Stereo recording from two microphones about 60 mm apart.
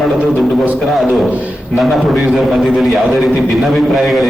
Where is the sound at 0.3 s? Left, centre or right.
Centre.